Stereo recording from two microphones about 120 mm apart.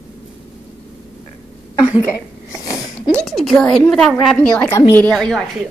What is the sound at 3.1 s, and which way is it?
A woman's voice, centre (ahead or behind).